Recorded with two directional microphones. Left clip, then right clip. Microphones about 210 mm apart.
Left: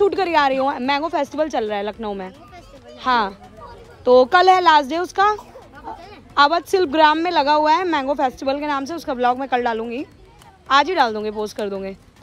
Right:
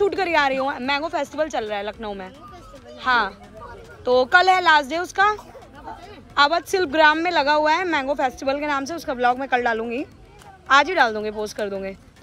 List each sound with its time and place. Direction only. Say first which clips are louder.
0.0 s a woman's voice: left 3 dB; 25° left (ahead or behind)